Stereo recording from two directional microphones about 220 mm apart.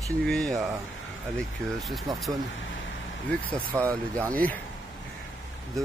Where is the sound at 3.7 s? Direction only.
10° right (ahead or behind).